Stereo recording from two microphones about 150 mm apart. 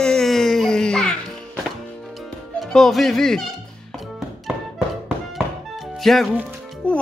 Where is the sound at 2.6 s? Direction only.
5° left (ahead or behind).